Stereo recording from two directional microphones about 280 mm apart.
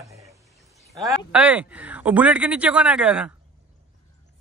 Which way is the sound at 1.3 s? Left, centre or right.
Centre.